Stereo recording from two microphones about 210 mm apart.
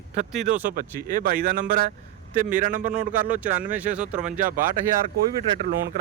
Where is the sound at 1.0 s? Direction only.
40° right (ahead or behind).